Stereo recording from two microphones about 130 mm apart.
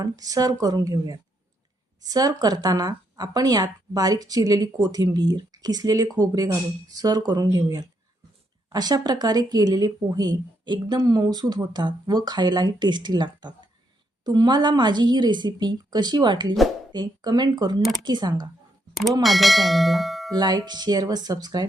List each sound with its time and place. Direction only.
0.0 s speech: 30° right (ahead or behind)
19.2 s bell: centre (ahead or behind)
20.3 s speech: 30° right (ahead or behind)